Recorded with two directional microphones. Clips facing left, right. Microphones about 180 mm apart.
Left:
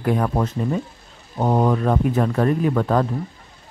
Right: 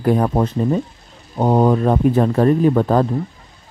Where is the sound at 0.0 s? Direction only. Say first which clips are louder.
Right 4 dB; 35° right (ahead or behind).